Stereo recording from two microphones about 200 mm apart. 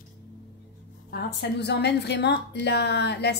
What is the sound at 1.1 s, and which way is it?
A woman's voice, 55° left (ahead or behind).